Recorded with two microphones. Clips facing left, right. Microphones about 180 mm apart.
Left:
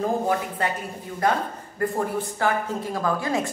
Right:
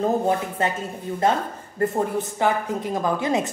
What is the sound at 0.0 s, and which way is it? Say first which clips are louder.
A woman's voice: right 2 dB; 25° right (ahead or behind).